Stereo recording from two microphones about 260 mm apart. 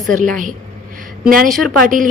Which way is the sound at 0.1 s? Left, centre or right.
Right.